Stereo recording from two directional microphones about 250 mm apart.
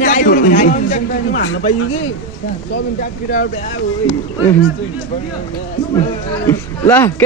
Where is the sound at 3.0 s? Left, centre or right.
Left.